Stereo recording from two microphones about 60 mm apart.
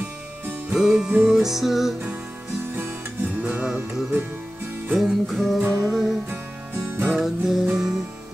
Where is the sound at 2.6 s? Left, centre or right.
Right.